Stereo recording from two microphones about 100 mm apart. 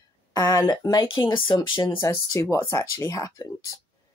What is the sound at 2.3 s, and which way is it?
Speech, 30° left (ahead or behind).